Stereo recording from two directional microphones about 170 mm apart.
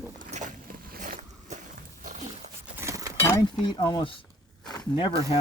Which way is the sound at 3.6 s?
25° left (ahead or behind).